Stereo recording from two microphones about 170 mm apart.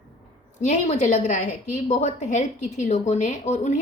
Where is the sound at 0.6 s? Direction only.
45° left (ahead or behind).